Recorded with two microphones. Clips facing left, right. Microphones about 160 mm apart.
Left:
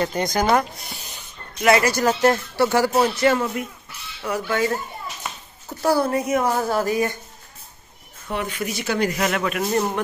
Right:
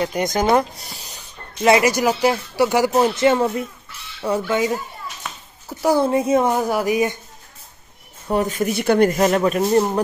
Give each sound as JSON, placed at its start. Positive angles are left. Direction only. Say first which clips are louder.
{"t": 0.0, "sound": "speech", "louder": "right 2 dB", "side_deg": -15}
{"t": 5.9, "sound": "speech", "louder": "right 4 dB", "side_deg": -25}
{"t": 6.5, "sound": "speech", "louder": "right 2 dB", "side_deg": -15}
{"t": 8.3, "sound": "speech", "louder": "right 7 dB", "side_deg": -40}
{"t": 9.2, "sound": "a man's voice", "louder": "right 6 dB", "side_deg": -35}